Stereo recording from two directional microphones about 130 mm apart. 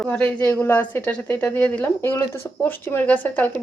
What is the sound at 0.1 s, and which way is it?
A woman's voice, 10° left (ahead or behind).